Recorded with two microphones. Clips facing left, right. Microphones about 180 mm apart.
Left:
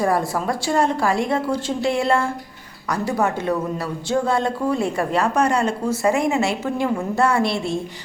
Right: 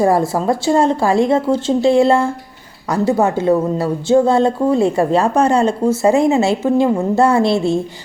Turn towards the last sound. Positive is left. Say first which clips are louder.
# right 7 dB
turn(degrees=-25)  # may be behind; listen again after turning